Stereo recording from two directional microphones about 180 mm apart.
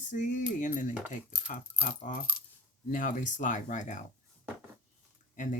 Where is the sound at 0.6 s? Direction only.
45° left (ahead or behind).